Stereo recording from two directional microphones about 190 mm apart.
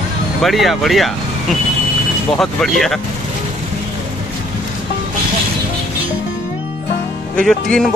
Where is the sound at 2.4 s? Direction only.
Centre (ahead or behind).